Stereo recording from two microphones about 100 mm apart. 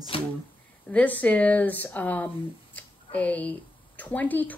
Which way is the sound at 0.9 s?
15° left (ahead or behind).